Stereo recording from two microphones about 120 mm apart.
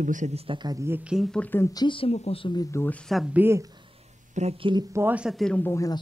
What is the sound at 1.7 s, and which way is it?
Speech, 45° left (ahead or behind).